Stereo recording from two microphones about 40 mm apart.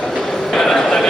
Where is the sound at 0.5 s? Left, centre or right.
Centre.